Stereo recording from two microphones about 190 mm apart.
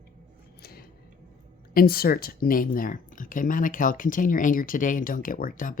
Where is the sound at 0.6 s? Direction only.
55° left (ahead or behind).